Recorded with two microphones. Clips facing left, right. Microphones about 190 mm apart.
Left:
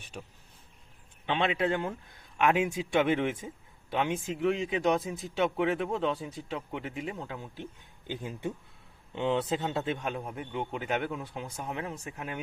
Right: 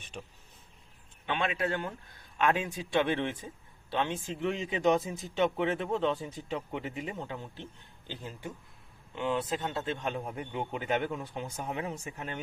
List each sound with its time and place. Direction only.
0.0 s speech: 10° left (ahead or behind)
1.3 s speech: 25° left (ahead or behind)
9.1 s speech: 25° left (ahead or behind); by 12.1 s centre (ahead or behind)
12.1 s speech: 10° left (ahead or behind)